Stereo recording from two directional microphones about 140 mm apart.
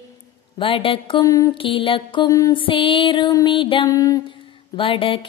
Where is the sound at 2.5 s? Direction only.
35° left (ahead or behind).